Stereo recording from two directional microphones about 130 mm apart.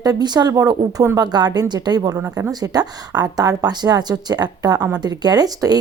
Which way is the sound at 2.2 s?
20° right (ahead or behind).